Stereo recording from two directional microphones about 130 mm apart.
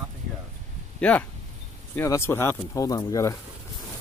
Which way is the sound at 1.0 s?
10° left (ahead or behind).